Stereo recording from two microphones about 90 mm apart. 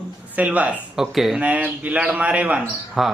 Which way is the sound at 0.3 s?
15° right (ahead or behind).